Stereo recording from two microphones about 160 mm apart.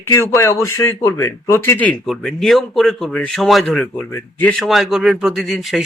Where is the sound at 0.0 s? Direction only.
15° left (ahead or behind).